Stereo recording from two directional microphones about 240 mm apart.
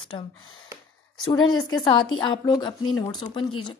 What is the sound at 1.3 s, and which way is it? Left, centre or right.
A woman's voice, centre.